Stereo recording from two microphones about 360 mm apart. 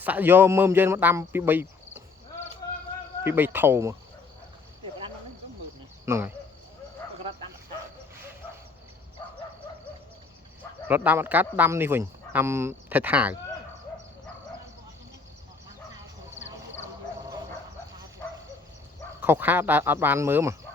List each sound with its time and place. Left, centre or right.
0.0 s speech: centre
3.2 s speech: centre
6.1 s speech: centre
10.8 s speech: centre
18.2 s bow-wow: centre
19.2 s speech: centre